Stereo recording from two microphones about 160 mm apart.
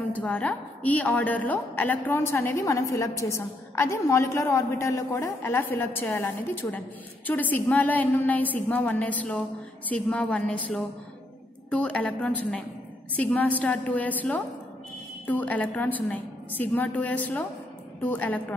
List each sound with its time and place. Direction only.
0.1 s a woman's voice: 10° left (ahead or behind)